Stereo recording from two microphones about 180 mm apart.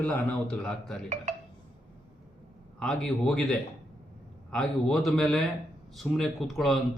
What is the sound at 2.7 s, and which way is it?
Speech, 5° left (ahead or behind).